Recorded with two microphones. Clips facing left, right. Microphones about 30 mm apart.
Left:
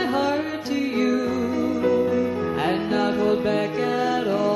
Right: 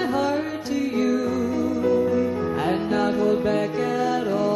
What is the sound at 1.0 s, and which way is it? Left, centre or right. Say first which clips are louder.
Music: even; centre.